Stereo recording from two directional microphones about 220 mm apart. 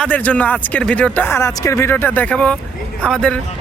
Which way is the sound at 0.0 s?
5° left (ahead or behind).